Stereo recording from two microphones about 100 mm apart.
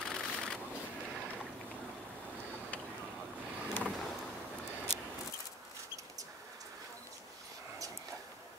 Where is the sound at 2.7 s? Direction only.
15° left (ahead or behind).